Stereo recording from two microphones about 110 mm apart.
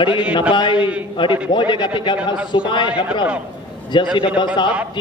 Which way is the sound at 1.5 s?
45° left (ahead or behind).